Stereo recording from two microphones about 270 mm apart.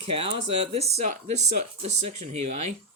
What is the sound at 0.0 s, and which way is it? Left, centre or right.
Speech, right.